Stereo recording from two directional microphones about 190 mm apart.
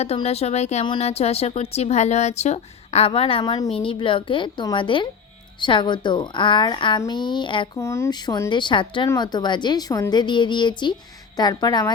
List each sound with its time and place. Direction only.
0.0 s a woman's voice: 35° left (ahead or behind)
7.8 s a woman's voice: 15° left (ahead or behind)